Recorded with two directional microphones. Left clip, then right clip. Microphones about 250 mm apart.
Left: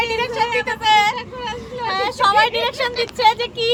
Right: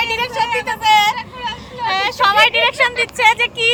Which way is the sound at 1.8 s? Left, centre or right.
Centre.